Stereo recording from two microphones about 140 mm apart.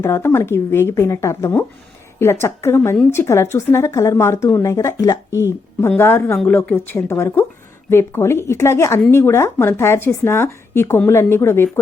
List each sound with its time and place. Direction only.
0.0 s a woman's voice: 15° left (ahead or behind)